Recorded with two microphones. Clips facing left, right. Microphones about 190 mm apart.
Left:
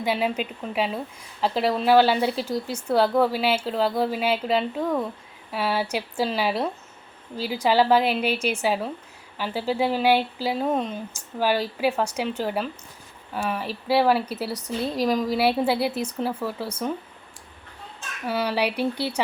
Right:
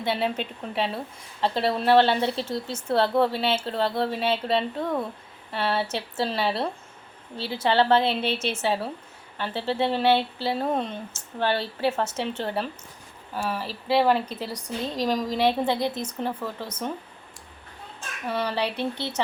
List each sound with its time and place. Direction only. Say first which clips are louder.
0.0 s a woman's voice: left 2 dB; 10° left (ahead or behind)
2.4 s speech: left 2 dB; 25° right (ahead or behind)
2.7 s a woman's voice: left 1 dB; centre (ahead or behind)
8.2 s speech: left 3 dB; 25° right (ahead or behind)
8.6 s a woman's voice: left 2 dB; 5° left (ahead or behind)
18.3 s a woman's voice: left 2 dB; 10° left (ahead or behind)